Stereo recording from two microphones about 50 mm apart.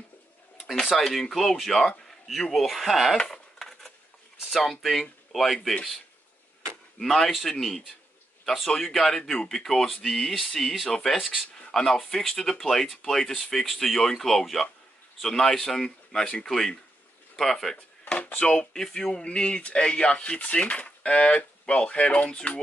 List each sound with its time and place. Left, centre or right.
0.8 s speech: centre
3.2 s a sound: centre
4.5 s speech: centre
7.0 s speech: centre
18.0 s drawer open or close: left
18.4 s speech: left
18.7 s speech: centre